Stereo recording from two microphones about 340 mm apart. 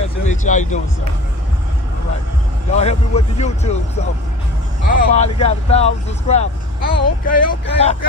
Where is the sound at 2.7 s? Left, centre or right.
Centre.